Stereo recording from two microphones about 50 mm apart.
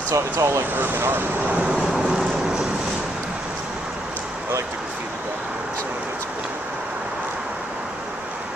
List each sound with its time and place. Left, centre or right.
0.1 s speech: right
0.7 s speech: right
1.6 s vehicle: centre